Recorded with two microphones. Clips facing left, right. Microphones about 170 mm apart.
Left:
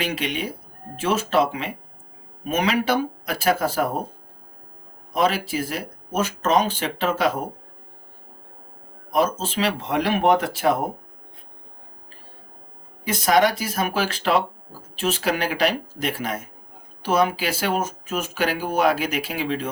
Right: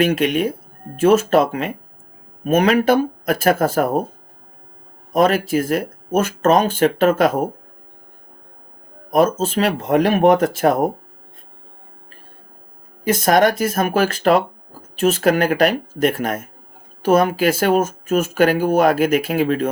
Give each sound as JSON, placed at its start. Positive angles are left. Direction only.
{"t": 0.0, "sound": "speech", "side_deg": -50}
{"t": 5.1, "sound": "speech", "side_deg": -50}
{"t": 9.0, "sound": "speech", "side_deg": -50}
{"t": 13.1, "sound": "speech", "side_deg": -50}